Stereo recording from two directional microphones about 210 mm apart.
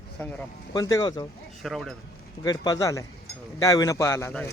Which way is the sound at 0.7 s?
15° left (ahead or behind).